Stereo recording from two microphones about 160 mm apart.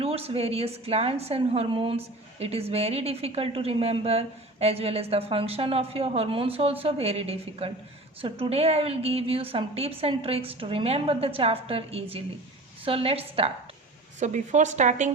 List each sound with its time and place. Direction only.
0.0 s a woman's voice: 40° right (ahead or behind)
14.2 s a woman's voice: 50° right (ahead or behind)